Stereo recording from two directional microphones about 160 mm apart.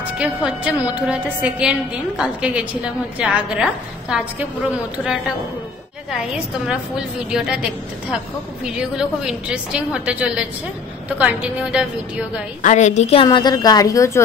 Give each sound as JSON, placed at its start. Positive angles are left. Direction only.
{"t": 0.0, "sound": "a woman's voice", "side_deg": -5}
{"t": 6.3, "sound": "a woman's voice", "side_deg": -5}
{"t": 12.6, "sound": "a woman's voice", "side_deg": 45}
{"t": 13.2, "sound": "a woman's voice", "side_deg": 25}